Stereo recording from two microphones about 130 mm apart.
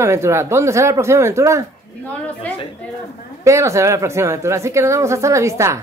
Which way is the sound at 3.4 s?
25° right (ahead or behind).